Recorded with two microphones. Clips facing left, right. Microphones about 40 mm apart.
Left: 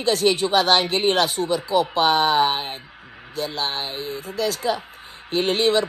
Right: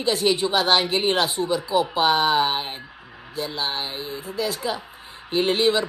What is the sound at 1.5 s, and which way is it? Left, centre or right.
Speech, left.